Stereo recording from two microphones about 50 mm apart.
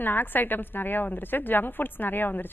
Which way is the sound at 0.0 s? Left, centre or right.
Left.